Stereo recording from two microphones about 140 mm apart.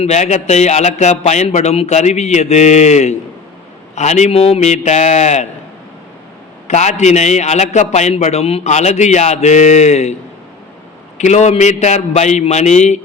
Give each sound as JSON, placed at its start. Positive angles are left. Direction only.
{"t": 0.0, "sound": "a man's voice", "side_deg": 55}
{"t": 6.7, "sound": "a man's voice", "side_deg": 55}
{"t": 11.2, "sound": "a man's voice", "side_deg": 55}